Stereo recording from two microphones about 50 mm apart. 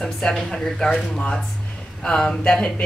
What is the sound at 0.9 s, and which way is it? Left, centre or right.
A woman's voice, left.